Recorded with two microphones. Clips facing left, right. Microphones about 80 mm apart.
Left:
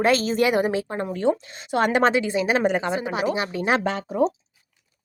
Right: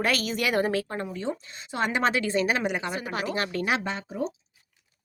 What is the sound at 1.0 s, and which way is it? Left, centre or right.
Speech, left.